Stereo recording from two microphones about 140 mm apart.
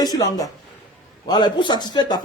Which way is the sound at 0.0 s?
30° left (ahead or behind).